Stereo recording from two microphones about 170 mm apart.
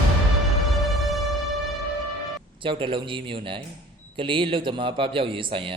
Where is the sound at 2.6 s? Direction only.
30° right (ahead or behind).